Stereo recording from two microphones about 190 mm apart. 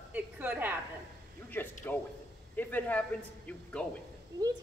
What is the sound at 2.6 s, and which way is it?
Speech, 10° left (ahead or behind).